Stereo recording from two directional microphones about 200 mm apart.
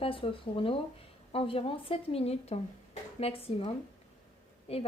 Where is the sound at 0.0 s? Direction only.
25° left (ahead or behind).